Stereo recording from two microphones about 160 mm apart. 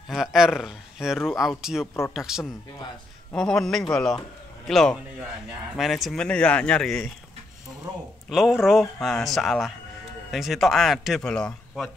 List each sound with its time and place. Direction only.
0.1 s speech: 5° right (ahead or behind)
7.9 s speech: 25° right (ahead or behind)
8.3 s speech: centre (ahead or behind)